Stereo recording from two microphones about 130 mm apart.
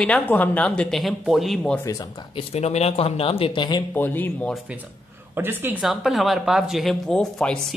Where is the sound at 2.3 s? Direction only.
55° left (ahead or behind); by 3.8 s 35° left (ahead or behind).